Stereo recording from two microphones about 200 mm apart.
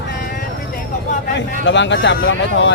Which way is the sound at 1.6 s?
65° left (ahead or behind).